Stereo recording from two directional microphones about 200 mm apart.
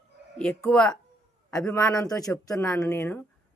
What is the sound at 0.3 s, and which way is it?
Speech, 5° left (ahead or behind).